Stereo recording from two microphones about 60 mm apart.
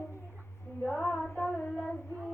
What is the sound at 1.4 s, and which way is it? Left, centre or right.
Child singing, left.